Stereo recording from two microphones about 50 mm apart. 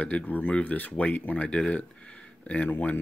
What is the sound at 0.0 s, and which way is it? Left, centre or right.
Speech, left.